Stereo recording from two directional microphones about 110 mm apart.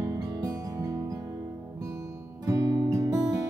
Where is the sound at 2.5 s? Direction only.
30° right (ahead or behind).